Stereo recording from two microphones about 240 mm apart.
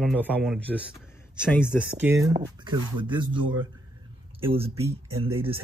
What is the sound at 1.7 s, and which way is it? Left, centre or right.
Speech, centre.